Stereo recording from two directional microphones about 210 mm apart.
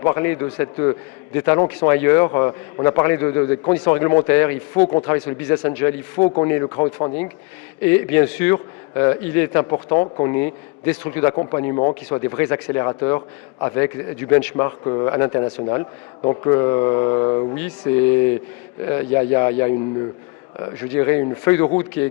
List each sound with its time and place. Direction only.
0.0 s a man's voice: 15° left (ahead or behind)
7.8 s a man's voice: 10° left (ahead or behind)
9.6 s a man's voice: 25° left (ahead or behind)
12.2 s a man's voice: 15° left (ahead or behind)